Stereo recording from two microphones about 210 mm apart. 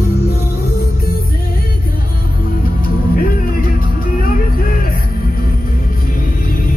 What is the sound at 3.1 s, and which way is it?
Music, 45° left (ahead or behind).